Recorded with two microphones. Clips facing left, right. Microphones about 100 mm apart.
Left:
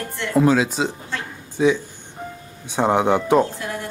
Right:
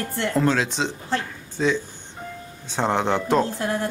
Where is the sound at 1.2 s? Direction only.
15° left (ahead or behind).